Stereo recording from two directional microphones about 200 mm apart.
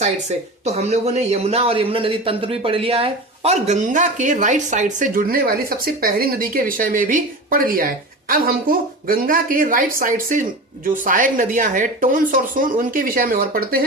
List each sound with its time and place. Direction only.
0.0 s speech: 35° right (ahead or behind)